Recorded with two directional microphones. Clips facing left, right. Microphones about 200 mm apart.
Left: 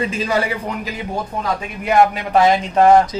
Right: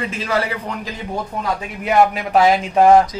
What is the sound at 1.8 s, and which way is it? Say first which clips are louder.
Speech: left 1 dB; 5° right (ahead or behind).